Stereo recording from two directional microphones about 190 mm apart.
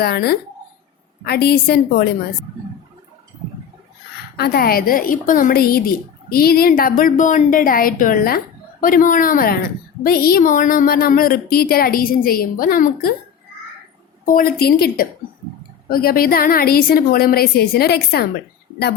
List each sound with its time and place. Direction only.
0.0 s a woman's voice: 55° left (ahead or behind)
4.4 s a woman's voice: 55° left (ahead or behind)
14.3 s a woman's voice: 50° left (ahead or behind)